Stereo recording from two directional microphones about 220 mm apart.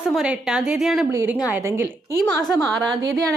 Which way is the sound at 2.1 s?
15° left (ahead or behind).